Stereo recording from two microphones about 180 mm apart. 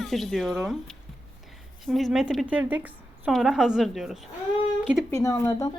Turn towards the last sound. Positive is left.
turn(degrees=20)  # may be behind; listen again after turning